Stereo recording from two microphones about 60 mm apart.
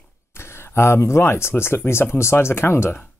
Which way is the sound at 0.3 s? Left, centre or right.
Left.